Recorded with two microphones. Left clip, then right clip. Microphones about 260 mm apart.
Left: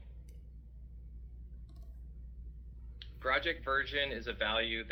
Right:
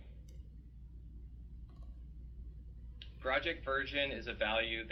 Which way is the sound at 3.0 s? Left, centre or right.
Left.